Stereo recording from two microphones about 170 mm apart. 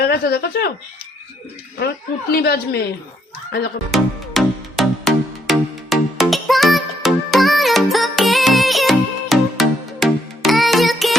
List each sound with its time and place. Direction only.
0.0 s speech: 70° left (ahead or behind)
2.3 s a woman's voice: 65° left (ahead or behind)
3.9 s music: centre (ahead or behind)